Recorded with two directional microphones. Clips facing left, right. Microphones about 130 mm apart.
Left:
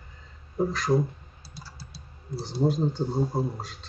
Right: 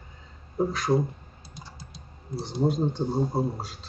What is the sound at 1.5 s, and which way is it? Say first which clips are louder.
Typing: even; 20° right (ahead or behind).